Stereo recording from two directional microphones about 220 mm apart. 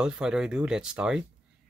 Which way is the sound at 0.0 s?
5° right (ahead or behind).